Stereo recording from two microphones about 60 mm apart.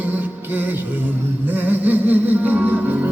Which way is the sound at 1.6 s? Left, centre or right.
Right.